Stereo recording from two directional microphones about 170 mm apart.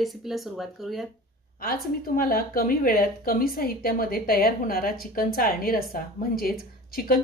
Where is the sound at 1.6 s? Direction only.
60° left (ahead or behind).